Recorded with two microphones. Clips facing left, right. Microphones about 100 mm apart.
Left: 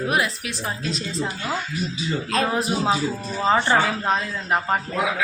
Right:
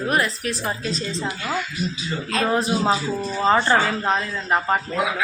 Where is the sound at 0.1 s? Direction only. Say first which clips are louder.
Right 1 dB; 5° left (ahead or behind).